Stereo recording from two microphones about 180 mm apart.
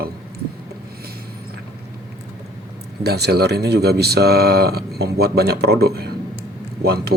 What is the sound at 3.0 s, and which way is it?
Speech, 65° right (ahead or behind).